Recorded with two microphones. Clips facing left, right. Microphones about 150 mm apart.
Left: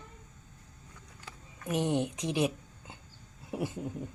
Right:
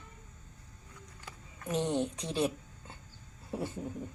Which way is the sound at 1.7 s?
15° left (ahead or behind).